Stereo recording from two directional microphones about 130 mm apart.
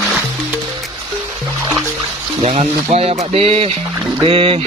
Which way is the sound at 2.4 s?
60° right (ahead or behind).